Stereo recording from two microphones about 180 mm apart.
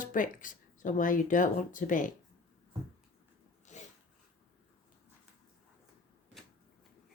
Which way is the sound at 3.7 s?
40° left (ahead or behind).